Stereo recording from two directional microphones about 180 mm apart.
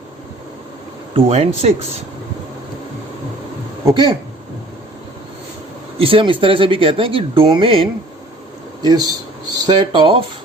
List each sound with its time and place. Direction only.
1.1 s speech: 35° right (ahead or behind)
3.8 s speech: 25° right (ahead or behind)
6.0 s speech: 30° right (ahead or behind)